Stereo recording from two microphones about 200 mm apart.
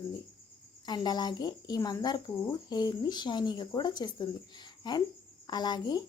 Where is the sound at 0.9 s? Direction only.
20° left (ahead or behind).